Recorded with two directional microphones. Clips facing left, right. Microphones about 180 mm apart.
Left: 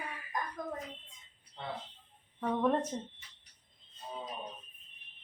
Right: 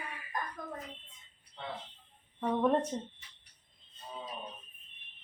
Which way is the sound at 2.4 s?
5° right (ahead or behind).